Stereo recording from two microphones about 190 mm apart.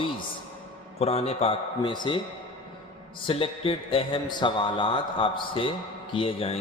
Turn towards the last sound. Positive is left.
turn(degrees=30)  # may be behind; listen again after turning